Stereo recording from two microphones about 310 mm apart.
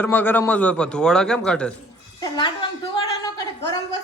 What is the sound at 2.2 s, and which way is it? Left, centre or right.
Speech, centre.